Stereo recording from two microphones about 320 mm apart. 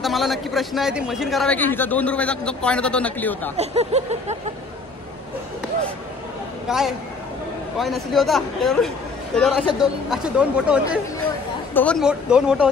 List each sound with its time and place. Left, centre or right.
0.0 s a man's voice: centre
3.5 s a sound: centre
6.7 s a man's voice: centre